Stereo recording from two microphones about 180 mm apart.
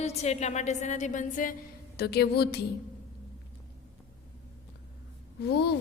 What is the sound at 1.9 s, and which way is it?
Speech, 65° left (ahead or behind).